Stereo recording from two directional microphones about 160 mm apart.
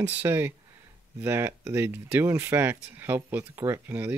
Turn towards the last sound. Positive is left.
turn(degrees=-10)  # may be behind; listen again after turning